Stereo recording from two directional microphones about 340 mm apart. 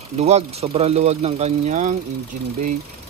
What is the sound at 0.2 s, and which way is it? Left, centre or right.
Speech, centre.